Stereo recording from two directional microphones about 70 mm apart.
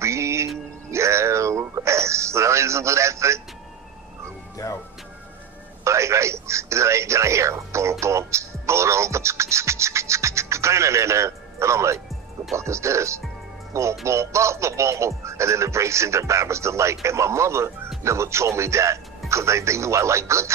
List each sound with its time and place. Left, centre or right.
0.0 s music: right
5.9 s speech: right